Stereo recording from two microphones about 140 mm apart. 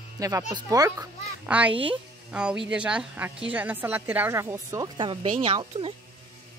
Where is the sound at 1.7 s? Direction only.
40° right (ahead or behind).